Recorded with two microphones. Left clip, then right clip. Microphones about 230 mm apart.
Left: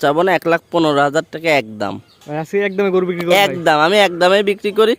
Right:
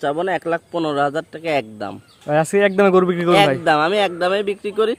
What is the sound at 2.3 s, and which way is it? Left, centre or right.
Speech, centre.